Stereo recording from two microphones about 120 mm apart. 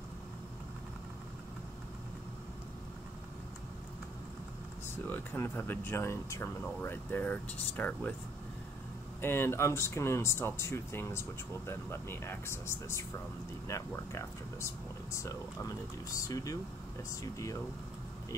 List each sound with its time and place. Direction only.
5.1 s speech: 15° left (ahead or behind)
9.2 s speech: 20° left (ahead or behind)